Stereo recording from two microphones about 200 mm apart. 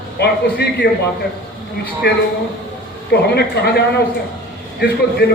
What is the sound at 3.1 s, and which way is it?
A man's voice, 55° left (ahead or behind).